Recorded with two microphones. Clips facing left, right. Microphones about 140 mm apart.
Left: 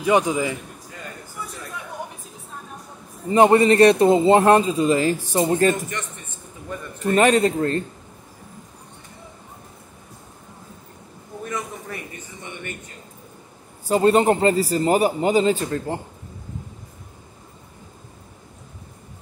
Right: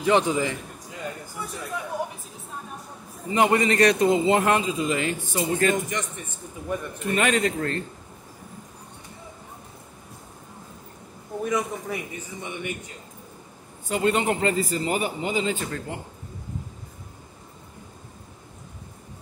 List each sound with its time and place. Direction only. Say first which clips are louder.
0.0 s a man's voice: left 2 dB; 10° left (ahead or behind)
3.3 s a man's voice: left 7 dB; 30° left (ahead or behind)
7.0 s a man's voice: left 7 dB; 35° left (ahead or behind)
11.4 s a man's voice: right 4 dB; 10° right (ahead or behind)
13.8 s a man's voice: left 7 dB; 35° left (ahead or behind)
15.6 s a man's voice: left 6 dB; 30° left (ahead or behind)